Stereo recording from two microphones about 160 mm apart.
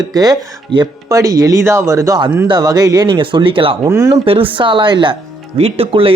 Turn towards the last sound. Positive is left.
turn(degrees=-35)  # may be behind; listen again after turning